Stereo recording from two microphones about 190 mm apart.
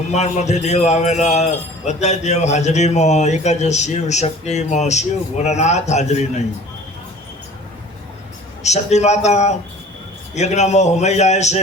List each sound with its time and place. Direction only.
0.1 s speech: 35° left (ahead or behind)
8.6 s speech: 35° left (ahead or behind)